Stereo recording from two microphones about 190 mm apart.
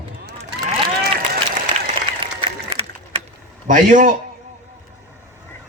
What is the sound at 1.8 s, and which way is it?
Applause, 30° right (ahead or behind).